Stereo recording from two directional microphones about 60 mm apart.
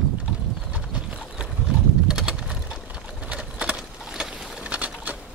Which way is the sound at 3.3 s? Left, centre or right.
Centre.